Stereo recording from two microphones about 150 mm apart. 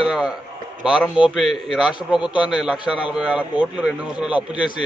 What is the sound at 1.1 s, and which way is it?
A man's voice, 5° right (ahead or behind).